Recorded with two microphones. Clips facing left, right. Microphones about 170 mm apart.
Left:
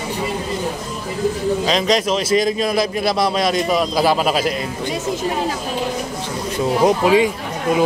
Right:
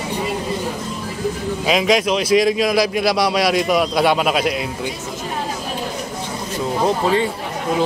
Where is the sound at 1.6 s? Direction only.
5° right (ahead or behind).